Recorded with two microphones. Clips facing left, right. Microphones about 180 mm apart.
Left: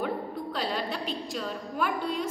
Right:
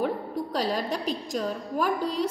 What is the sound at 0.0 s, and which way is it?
A woman's voice, 40° right (ahead or behind).